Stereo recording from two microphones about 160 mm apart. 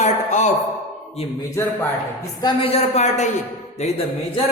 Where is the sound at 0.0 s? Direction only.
50° left (ahead or behind).